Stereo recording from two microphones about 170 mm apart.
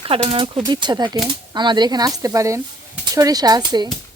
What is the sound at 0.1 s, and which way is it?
Speech, 35° right (ahead or behind).